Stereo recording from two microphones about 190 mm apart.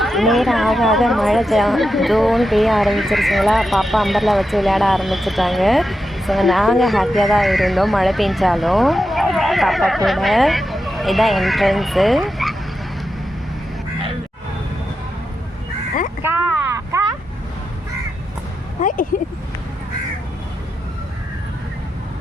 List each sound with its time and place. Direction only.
0.0 s speech: centre (ahead or behind)
16.7 s vehicle: 15° right (ahead or behind)
18.8 s a sound: 45° left (ahead or behind)